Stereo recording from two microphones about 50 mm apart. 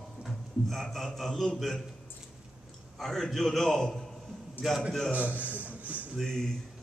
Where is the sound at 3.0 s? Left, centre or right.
Centre.